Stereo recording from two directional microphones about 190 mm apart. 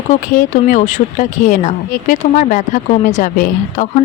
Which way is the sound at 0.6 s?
40° left (ahead or behind).